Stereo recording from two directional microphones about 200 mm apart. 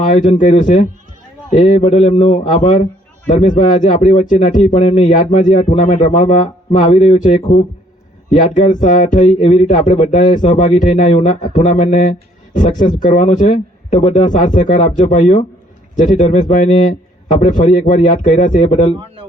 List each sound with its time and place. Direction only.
0.1 s speech: 40° left (ahead or behind)